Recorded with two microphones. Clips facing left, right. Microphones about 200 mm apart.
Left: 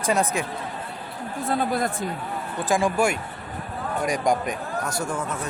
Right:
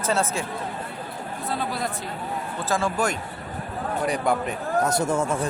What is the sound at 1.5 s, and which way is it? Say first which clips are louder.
Speech: left 5 dB; 50° left (ahead or behind).